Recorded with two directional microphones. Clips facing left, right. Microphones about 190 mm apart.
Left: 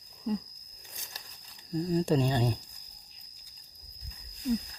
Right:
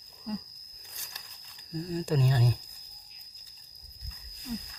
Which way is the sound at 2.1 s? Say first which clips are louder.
Left 2 dB; 25° left (ahead or behind).